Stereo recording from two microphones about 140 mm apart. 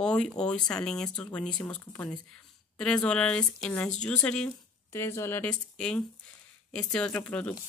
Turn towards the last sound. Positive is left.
turn(degrees=10)  # may be behind; listen again after turning